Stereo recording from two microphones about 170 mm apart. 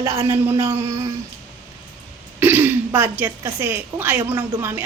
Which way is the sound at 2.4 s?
15° right (ahead or behind).